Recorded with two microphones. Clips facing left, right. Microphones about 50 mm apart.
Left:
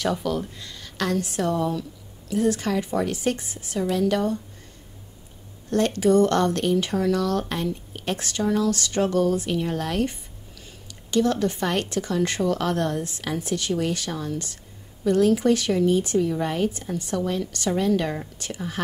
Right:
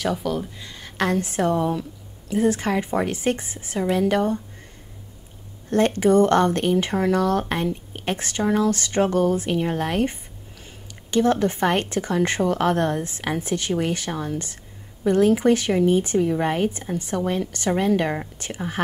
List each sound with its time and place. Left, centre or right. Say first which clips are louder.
0.0 s speech: right 1 dB; centre
0.6 s speech: right 4 dB; right
5.7 s speech: right 2 dB; right